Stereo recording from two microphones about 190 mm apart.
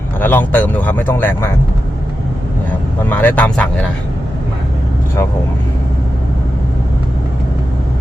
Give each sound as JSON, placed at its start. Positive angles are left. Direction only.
{"t": 0.2, "sound": "speech", "side_deg": 10}
{"t": 3.0, "sound": "speech", "side_deg": 10}